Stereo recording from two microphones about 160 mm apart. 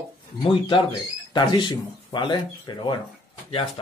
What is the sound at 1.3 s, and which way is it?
Speech, 30° left (ahead or behind).